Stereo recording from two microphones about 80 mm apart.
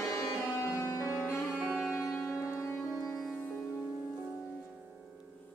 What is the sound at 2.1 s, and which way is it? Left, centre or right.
Music, left.